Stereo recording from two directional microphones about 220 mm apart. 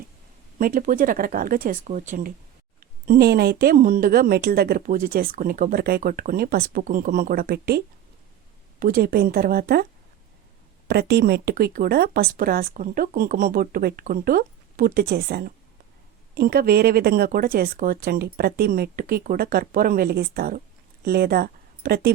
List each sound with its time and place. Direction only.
0.6 s speech: 40° right (ahead or behind)
8.8 s speech: 40° right (ahead or behind)
10.8 s speech: 45° right (ahead or behind)